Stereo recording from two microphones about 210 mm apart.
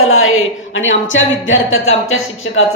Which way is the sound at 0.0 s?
75° left (ahead or behind).